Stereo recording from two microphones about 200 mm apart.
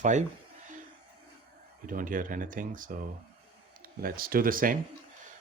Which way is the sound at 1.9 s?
40° right (ahead or behind).